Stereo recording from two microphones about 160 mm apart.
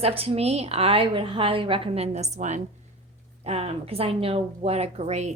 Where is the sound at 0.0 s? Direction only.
35° right (ahead or behind).